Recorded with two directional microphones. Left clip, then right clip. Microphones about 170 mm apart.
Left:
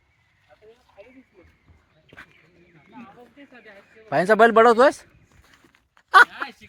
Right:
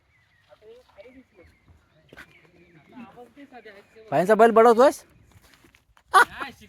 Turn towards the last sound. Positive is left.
turn(degrees=-15)  # may be behind; listen again after turning